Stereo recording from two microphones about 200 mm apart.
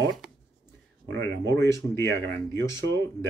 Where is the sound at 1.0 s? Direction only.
65° right (ahead or behind).